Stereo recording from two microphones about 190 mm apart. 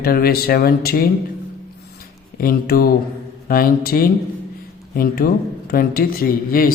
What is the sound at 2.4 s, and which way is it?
A man's voice, 50° left (ahead or behind).